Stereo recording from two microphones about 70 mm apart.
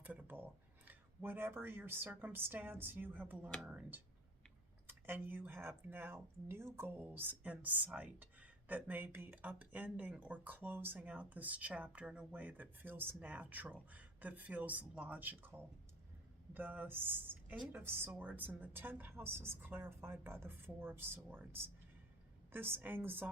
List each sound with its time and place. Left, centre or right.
0.0 s speech: right
3.6 s speech: centre
4.9 s a woman's voice: right